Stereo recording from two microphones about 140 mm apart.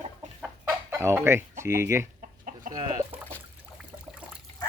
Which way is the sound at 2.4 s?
75° right (ahead or behind).